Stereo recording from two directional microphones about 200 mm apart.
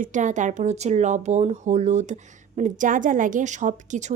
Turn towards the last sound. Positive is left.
turn(degrees=-35)  # may be behind; listen again after turning